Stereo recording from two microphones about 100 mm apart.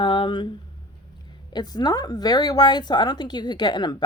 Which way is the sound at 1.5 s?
40° left (ahead or behind).